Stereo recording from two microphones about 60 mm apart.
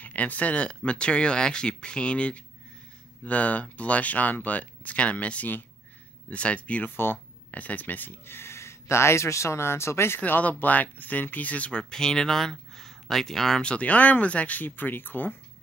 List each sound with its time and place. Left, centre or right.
0.0 s speech: left
10.2 s speech: left
11.9 s speech: centre
13.6 s speech: left